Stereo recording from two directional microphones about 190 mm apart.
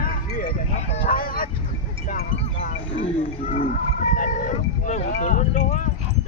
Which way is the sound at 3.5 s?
45° left (ahead or behind).